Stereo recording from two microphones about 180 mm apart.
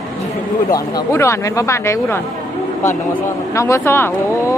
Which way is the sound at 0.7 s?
20° left (ahead or behind).